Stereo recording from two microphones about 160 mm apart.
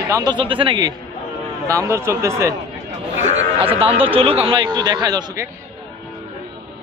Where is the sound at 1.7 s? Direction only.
20° right (ahead or behind).